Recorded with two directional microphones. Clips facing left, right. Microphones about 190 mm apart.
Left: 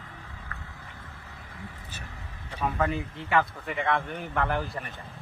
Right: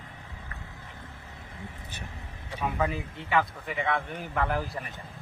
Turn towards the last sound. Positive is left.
turn(degrees=0)  # may be behind; listen again after turning